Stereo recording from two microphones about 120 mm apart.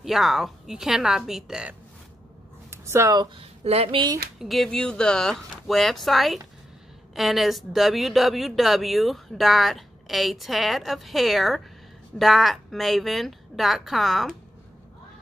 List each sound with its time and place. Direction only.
0.0 s speech: centre (ahead or behind)
2.7 s a sound: 25° right (ahead or behind)
3.3 s speech: 55° right (ahead or behind)
4.4 s speech: centre (ahead or behind)